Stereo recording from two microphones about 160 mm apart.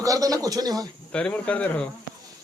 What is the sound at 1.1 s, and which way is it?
Speech, 5° left (ahead or behind).